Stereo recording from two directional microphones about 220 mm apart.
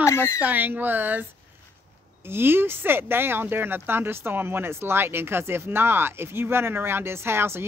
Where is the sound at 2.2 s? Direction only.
10° right (ahead or behind).